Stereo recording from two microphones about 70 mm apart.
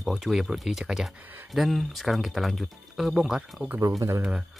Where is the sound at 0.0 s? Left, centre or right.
Centre.